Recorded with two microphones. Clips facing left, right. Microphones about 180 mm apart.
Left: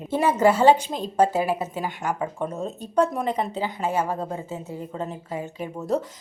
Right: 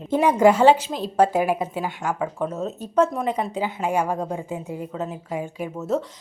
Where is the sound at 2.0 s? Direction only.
Centre (ahead or behind).